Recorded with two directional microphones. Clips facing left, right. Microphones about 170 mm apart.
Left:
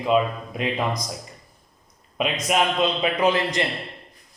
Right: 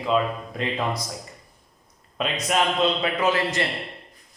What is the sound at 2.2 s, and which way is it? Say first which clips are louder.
A man's voice: left 1 dB; 15° left (ahead or behind).